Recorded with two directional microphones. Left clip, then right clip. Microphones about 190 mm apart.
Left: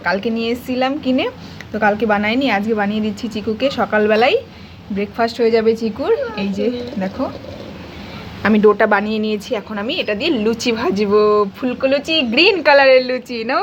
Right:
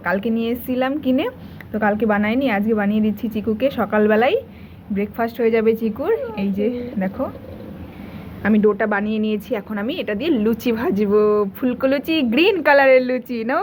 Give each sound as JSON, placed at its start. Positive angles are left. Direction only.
{"t": 0.0, "sound": "a woman's voice", "side_deg": 5}
{"t": 8.4, "sound": "speech", "side_deg": 20}
{"t": 9.5, "sound": "a woman's voice", "side_deg": 0}
{"t": 11.6, "sound": "speech", "side_deg": -10}
{"t": 12.3, "sound": "a woman's voice", "side_deg": 5}